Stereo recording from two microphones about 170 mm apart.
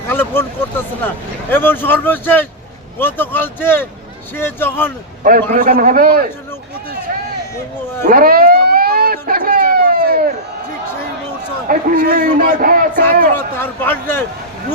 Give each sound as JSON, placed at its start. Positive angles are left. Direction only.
{"t": 0.1, "sound": "speech", "side_deg": 15}
{"t": 5.2, "sound": "a man's voice", "side_deg": -50}
{"t": 8.0, "sound": "a sound", "side_deg": -60}
{"t": 11.7, "sound": "a man's voice", "side_deg": -50}
{"t": 13.3, "sound": "speech", "side_deg": 10}